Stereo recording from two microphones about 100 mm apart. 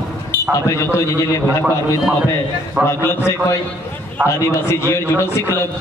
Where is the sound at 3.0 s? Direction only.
25° left (ahead or behind).